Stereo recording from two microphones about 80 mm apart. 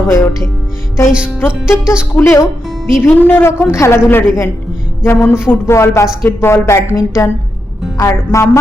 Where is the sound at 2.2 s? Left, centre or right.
Left.